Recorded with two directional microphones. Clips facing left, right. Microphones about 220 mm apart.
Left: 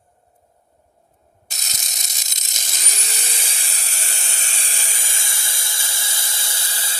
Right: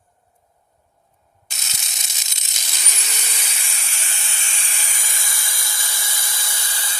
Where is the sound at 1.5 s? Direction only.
40° left (ahead or behind).